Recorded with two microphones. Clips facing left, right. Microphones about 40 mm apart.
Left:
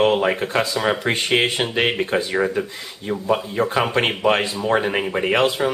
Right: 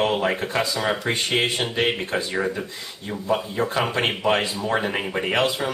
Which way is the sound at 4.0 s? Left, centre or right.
Centre.